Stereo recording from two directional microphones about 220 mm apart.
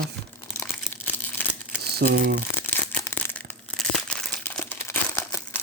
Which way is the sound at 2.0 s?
45° right (ahead or behind).